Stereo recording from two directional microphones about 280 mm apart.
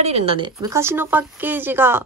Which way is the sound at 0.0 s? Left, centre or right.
Right.